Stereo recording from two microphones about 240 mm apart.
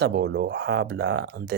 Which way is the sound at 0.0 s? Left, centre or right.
Right.